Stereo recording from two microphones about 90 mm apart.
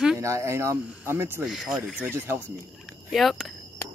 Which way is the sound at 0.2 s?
35° right (ahead or behind).